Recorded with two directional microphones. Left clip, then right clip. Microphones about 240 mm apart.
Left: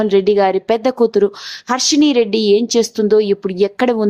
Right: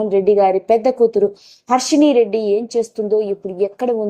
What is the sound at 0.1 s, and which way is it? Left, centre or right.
A woman's voice, centre.